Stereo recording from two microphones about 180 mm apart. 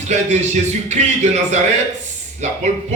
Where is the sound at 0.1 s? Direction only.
40° right (ahead or behind).